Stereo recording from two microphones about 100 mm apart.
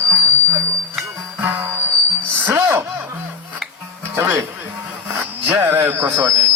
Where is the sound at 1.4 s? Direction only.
25° right (ahead or behind).